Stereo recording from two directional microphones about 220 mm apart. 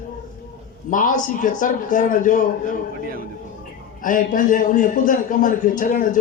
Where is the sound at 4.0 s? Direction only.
40° left (ahead or behind).